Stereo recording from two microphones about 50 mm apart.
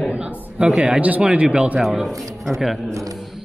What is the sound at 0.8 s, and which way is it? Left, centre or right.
Speech, right.